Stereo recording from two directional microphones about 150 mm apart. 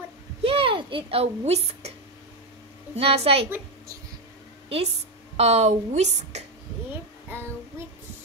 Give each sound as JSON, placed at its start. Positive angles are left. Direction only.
{"t": 0.4, "sound": "speech", "side_deg": -40}
{"t": 3.0, "sound": "a woman's voice", "side_deg": -40}
{"t": 3.4, "sound": "a sound", "side_deg": -15}
{"t": 5.4, "sound": "a woman's voice", "side_deg": -45}
{"t": 7.2, "sound": "child singing", "side_deg": -15}